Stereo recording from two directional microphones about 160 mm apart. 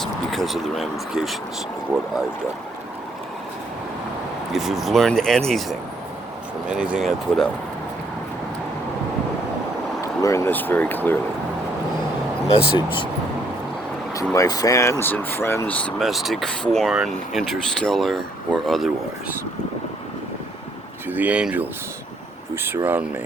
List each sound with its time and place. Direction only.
0.0 s speech: centre (ahead or behind)
4.5 s speech: centre (ahead or behind)
10.0 s speech: 20° left (ahead or behind)
12.5 s speech: 35° left (ahead or behind)
14.3 s speech: 25° left (ahead or behind); by 18.9 s centre (ahead or behind)
21.1 s speech: 10° right (ahead or behind)